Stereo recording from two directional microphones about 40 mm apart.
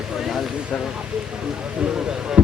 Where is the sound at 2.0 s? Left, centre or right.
Right.